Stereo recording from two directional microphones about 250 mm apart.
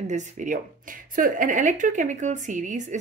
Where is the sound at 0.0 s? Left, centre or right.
Right.